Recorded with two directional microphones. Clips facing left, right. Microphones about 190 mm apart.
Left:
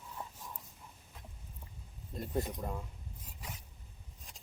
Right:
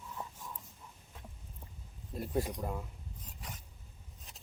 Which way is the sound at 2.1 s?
5° right (ahead or behind).